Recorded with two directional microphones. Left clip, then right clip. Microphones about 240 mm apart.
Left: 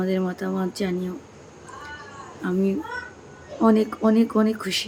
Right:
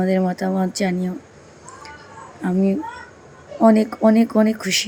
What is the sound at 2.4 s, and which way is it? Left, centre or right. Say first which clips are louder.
Speech: right 3 dB; centre.